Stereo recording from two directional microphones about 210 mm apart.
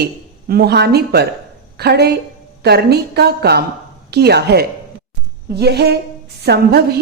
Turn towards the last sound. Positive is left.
turn(degrees=-50)  # may be behind; listen again after turning